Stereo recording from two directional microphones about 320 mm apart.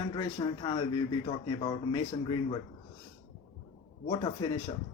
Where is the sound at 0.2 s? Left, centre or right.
Centre.